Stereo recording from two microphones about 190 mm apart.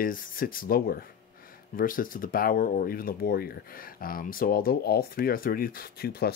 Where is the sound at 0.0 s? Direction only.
45° left (ahead or behind).